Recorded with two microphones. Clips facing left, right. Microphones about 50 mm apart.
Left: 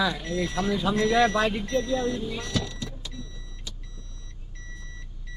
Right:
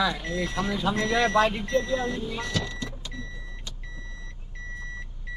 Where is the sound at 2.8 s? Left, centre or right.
Right.